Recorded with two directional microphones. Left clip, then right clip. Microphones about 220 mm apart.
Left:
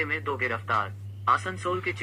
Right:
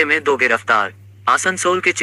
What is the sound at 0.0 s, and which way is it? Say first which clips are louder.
Speech: right 13 dB; 40° right (ahead or behind).